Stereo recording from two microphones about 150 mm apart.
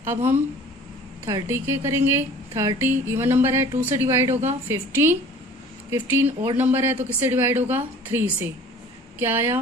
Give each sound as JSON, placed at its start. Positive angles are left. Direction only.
{"t": 0.0, "sound": "a woman's voice", "side_deg": -15}